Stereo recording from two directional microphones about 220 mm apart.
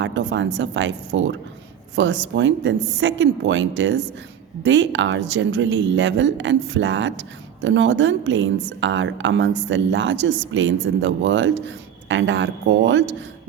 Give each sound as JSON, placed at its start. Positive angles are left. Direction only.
{"t": 0.0, "sound": "speech", "side_deg": -55}